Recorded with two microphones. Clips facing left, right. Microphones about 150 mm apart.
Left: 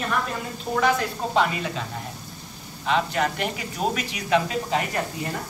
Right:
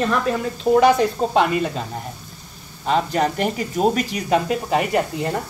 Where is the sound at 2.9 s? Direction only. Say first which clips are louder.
Right 4 dB; 40° right (ahead or behind).